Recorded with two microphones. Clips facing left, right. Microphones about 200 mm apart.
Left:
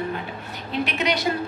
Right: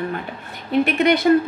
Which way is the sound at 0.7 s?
55° right (ahead or behind).